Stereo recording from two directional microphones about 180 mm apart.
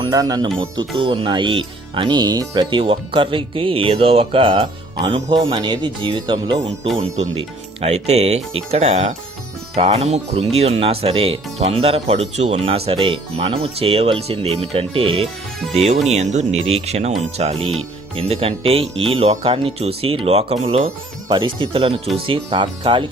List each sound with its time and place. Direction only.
0.0 s speech: 20° right (ahead or behind)
7.2 s speech: 35° right (ahead or behind)